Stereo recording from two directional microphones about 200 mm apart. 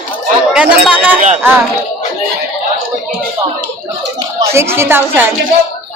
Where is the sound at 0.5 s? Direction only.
5° right (ahead or behind).